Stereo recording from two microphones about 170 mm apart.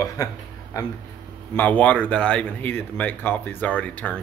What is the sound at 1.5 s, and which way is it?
Speech, 10° left (ahead or behind).